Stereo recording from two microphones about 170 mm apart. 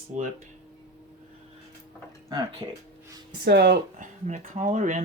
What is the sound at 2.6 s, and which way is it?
Speech, 20° right (ahead or behind).